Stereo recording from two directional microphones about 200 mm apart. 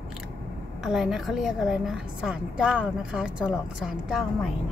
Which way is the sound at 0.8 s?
Centre (ahead or behind).